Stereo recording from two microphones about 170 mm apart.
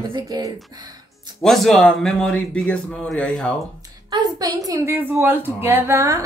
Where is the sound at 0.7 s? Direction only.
25° right (ahead or behind).